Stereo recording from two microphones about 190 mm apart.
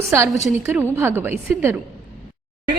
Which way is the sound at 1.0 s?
10° right (ahead or behind).